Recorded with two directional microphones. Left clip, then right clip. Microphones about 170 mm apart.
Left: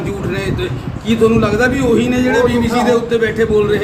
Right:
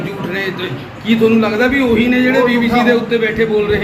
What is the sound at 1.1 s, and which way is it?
A man's voice, 65° left (ahead or behind).